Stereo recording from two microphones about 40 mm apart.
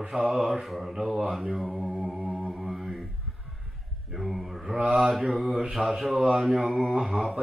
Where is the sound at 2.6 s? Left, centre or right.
Centre.